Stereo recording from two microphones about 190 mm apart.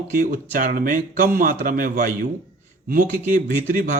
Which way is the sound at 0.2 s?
45° right (ahead or behind).